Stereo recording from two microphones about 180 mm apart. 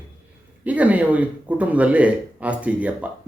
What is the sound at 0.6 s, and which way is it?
Speech, 10° right (ahead or behind).